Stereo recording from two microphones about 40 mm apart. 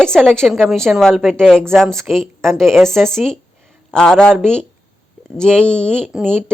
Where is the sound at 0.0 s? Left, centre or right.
Centre.